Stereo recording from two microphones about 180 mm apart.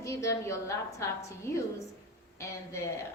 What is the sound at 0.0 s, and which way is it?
A woman's voice, 15° left (ahead or behind).